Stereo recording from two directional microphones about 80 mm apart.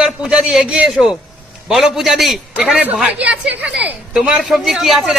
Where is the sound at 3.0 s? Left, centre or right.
Centre.